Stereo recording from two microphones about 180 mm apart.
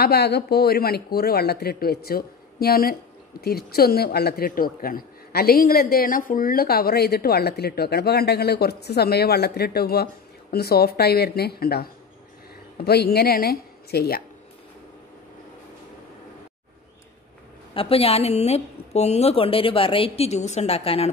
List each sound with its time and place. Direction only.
0.0 s speech: 65° left (ahead or behind)
17.7 s a woman's voice: 30° left (ahead or behind)